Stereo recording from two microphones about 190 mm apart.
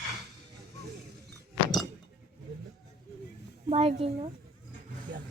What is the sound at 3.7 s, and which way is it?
Speech, 30° right (ahead or behind).